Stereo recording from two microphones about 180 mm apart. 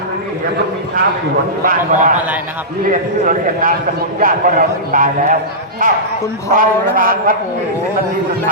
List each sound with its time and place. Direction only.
1.6 s a man's voice: 45° right (ahead or behind)